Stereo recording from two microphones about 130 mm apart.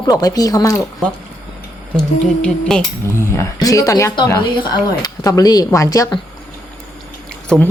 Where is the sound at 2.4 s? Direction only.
5° left (ahead or behind).